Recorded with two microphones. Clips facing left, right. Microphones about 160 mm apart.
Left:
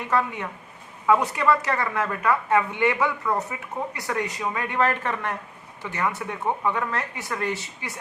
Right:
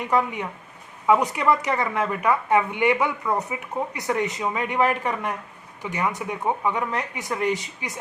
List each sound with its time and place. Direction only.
0.0 s a woman's voice: 15° right (ahead or behind)